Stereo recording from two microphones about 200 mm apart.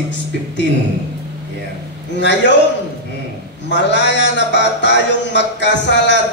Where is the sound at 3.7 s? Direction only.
60° left (ahead or behind).